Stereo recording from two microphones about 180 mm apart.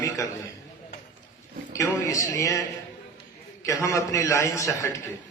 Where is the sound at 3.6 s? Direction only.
15° left (ahead or behind).